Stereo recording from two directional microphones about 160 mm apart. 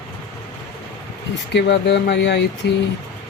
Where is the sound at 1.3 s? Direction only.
90° left.